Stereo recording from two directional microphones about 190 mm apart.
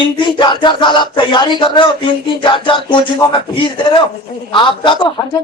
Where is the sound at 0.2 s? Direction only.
25° left (ahead or behind).